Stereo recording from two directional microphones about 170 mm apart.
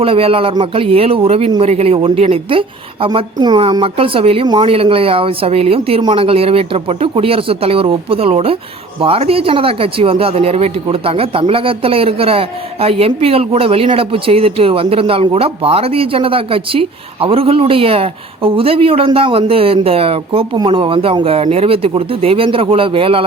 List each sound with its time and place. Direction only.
0.0 s speech: 35° right (ahead or behind)